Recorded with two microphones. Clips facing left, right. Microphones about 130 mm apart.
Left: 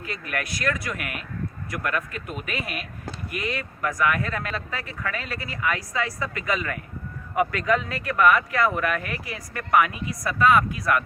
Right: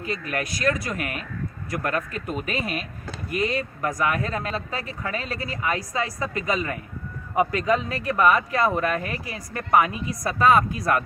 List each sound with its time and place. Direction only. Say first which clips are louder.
0.0 s speech: right 3 dB; 25° right (ahead or behind)